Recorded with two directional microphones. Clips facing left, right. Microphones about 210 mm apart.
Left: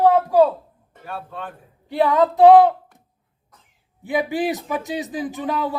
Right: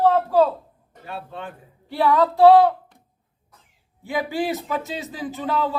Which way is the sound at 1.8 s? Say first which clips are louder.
Left 2 dB; 20° left (ahead or behind).